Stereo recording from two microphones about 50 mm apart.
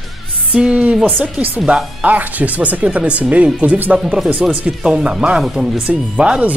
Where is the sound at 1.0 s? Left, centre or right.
Right.